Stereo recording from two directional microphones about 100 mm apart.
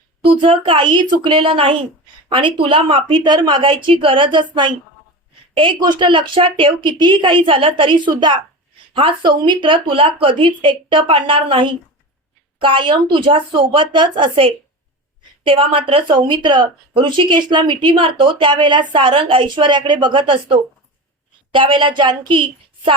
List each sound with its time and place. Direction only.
0.2 s a woman's voice: 65° right (ahead or behind)
18.9 s a woman's voice: 60° right (ahead or behind)